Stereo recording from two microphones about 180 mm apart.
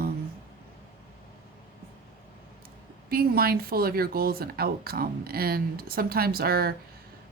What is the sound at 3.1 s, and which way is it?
Speech, 55° right (ahead or behind).